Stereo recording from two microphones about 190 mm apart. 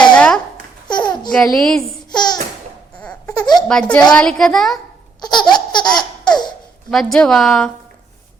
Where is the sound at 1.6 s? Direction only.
5° left (ahead or behind).